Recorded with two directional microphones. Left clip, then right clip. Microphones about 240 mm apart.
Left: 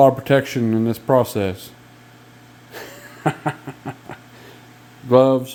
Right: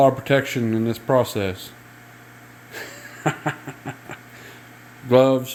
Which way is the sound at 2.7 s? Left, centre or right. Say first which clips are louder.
Right 1 dB; centre.